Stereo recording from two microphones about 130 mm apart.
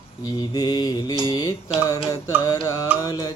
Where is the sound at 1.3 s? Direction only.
30° left (ahead or behind).